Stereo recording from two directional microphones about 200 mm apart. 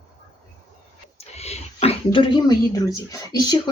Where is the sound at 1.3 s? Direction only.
30° left (ahead or behind).